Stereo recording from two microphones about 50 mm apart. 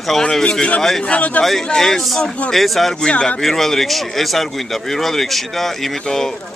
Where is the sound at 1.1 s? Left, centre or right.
Left.